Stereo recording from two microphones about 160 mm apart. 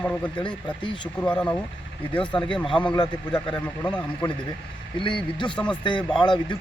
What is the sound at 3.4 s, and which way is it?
Speech, 30° left (ahead or behind).